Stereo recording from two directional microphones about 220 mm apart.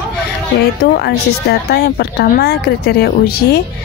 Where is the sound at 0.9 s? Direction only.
45° left (ahead or behind).